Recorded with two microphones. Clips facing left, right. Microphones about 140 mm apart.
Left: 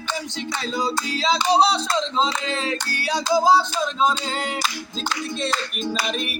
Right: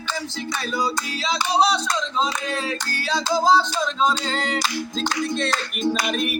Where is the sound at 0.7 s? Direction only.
30° left (ahead or behind).